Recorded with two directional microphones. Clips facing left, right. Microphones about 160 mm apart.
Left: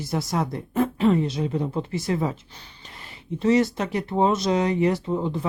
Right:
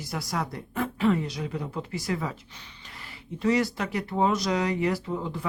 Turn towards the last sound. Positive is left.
turn(degrees=25)  # may be behind; listen again after turning